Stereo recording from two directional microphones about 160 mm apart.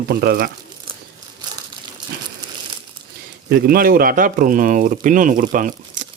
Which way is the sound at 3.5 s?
70° right (ahead or behind).